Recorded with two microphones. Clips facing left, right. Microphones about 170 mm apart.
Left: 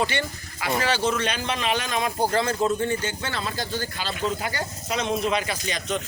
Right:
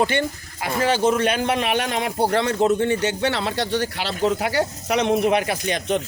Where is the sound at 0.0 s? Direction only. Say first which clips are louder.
Right 5 dB; 50° right (ahead or behind).